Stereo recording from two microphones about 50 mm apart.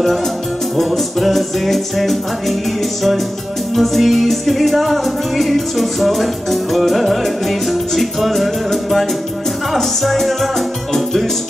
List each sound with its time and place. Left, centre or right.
0.7 s music: centre
3.7 s music: centre